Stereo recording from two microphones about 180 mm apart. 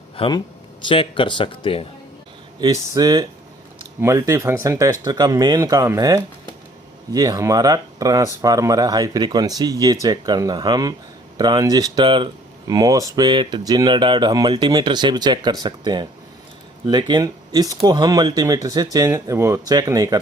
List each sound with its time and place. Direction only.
0.2 s speech: 25° left (ahead or behind)
2.6 s speech: 20° right (ahead or behind)